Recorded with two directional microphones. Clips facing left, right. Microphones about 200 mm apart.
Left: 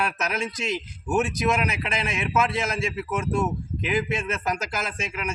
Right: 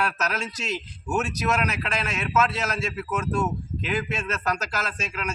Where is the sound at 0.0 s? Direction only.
15° left (ahead or behind).